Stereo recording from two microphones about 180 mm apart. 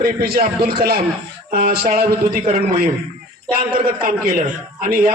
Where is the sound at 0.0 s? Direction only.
60° right (ahead or behind).